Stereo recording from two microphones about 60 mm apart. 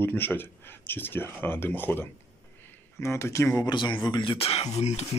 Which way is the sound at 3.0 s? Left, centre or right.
Left.